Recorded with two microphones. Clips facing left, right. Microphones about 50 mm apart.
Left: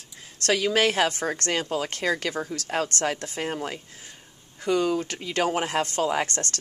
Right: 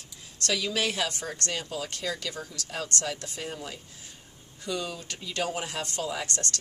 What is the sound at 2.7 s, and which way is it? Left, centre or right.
A woman's voice, left.